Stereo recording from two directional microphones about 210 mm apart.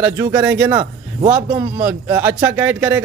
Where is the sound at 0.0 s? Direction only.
15° right (ahead or behind).